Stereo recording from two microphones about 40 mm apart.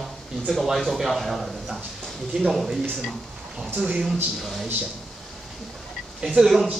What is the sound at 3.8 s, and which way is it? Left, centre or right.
Speech, right.